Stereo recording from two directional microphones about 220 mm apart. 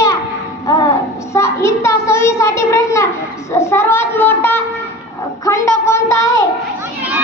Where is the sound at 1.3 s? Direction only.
10° left (ahead or behind).